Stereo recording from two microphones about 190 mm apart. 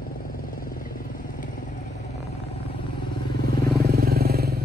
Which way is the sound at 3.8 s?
55° right (ahead or behind).